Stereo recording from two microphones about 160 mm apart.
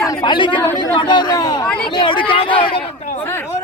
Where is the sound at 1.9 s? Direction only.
30° left (ahead or behind).